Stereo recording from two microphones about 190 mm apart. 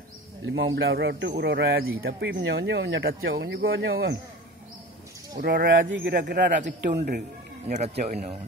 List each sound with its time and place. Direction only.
0.5 s a man's voice: 90° right
0.7 s speech: 60° right (ahead or behind); by 2.0 s 90° right
2.0 s speech: 65° right (ahead or behind)
3.3 s speech: 65° right (ahead or behind)
5.4 s speech: 50° right (ahead or behind)
5.9 s speech: 75° right (ahead or behind)
7.1 s a man's voice: 45° right (ahead or behind)